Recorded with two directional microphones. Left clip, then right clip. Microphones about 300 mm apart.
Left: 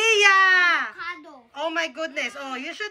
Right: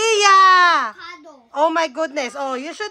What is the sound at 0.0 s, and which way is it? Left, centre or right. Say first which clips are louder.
Baby cry: right 4 dB; centre.